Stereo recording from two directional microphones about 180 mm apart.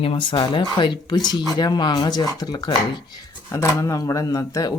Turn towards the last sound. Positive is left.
turn(degrees=20)  # may be behind; listen again after turning